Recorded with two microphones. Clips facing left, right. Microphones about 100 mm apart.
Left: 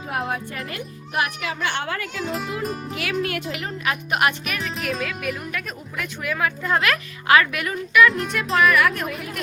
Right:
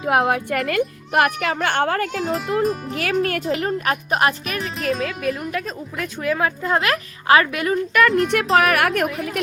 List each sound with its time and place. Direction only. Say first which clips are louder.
0.0 s speech: right 8 dB; 80° right; by 7.8 s 30° right (ahead or behind)
8.0 s speech: right 2 dB; centre (ahead or behind)
8.5 s a woman's voice: even; 70° right (ahead or behind)